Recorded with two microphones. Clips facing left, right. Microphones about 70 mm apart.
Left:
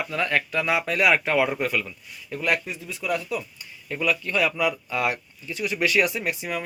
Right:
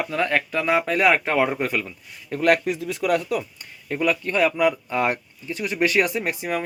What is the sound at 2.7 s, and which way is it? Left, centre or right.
Speech, right.